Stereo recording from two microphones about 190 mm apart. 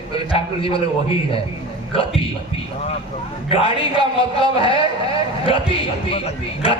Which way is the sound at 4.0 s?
30° left (ahead or behind).